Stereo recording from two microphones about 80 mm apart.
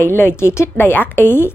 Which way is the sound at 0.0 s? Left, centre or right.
Left.